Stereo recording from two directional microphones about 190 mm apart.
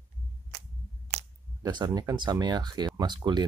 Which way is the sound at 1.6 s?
20° right (ahead or behind).